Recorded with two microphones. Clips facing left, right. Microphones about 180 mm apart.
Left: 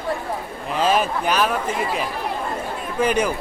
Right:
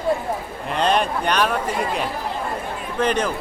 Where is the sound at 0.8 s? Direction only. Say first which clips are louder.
Even; 5° left (ahead or behind).